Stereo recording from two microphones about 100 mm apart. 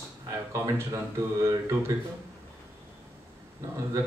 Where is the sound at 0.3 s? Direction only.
30° right (ahead or behind).